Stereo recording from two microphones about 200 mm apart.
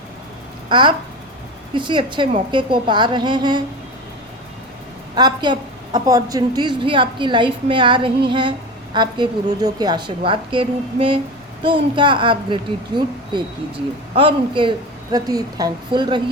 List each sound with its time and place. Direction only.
0.7 s a woman's voice: 25° right (ahead or behind)
5.1 s a woman's voice: 20° right (ahead or behind)